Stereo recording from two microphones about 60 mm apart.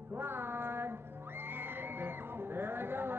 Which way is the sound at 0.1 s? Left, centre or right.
Right.